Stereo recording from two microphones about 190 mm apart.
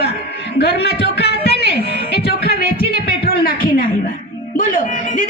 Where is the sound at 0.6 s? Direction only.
60° left (ahead or behind).